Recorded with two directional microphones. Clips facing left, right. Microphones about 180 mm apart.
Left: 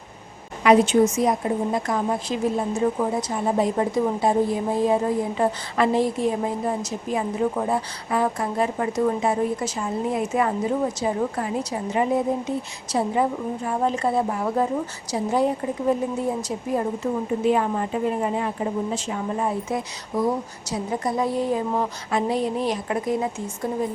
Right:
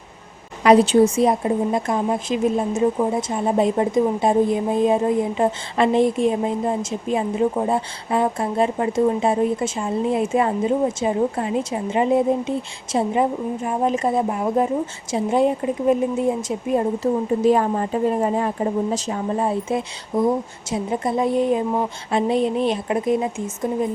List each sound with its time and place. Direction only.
0.6 s a woman's voice: 35° right (ahead or behind)
17.0 s a woman's voice: 40° right (ahead or behind); by 23.8 s 20° right (ahead or behind)